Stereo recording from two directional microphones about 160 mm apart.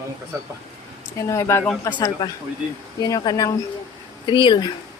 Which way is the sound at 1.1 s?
20° left (ahead or behind).